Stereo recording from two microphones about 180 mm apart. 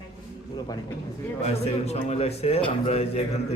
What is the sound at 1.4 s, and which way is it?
Speech, 35° left (ahead or behind).